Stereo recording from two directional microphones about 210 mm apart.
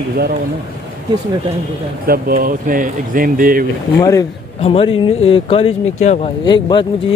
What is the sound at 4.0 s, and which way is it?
Speech, 15° left (ahead or behind).